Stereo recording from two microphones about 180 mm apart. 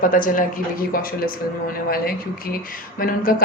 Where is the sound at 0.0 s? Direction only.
50° left (ahead or behind).